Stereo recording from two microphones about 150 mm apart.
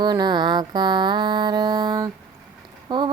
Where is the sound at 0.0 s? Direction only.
30° right (ahead or behind).